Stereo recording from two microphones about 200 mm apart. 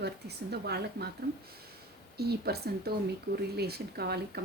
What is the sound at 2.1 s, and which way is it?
Speech, 50° right (ahead or behind).